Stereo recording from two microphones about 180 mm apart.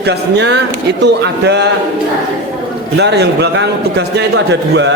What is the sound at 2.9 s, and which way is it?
A man's voice, 70° right (ahead or behind).